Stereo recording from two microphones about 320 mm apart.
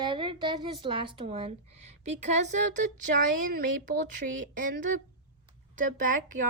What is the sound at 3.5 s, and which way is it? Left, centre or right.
Speech, right.